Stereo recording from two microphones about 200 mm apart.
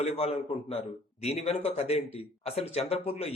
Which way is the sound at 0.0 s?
30° left (ahead or behind).